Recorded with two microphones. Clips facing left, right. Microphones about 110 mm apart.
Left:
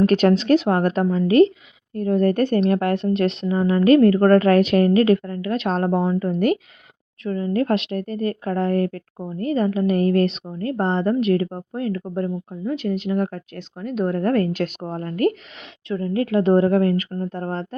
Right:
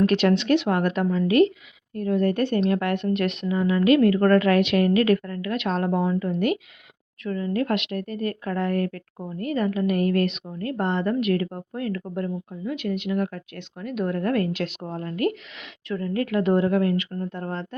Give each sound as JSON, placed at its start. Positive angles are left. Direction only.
{"t": 0.0, "sound": "a woman's voice", "side_deg": 40}
{"t": 2.7, "sound": "a woman's voice", "side_deg": 35}
{"t": 7.3, "sound": "a woman's voice", "side_deg": 30}
{"t": 15.9, "sound": "a woman's voice", "side_deg": 25}